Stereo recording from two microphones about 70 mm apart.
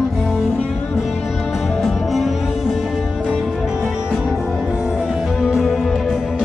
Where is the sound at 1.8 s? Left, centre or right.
Centre.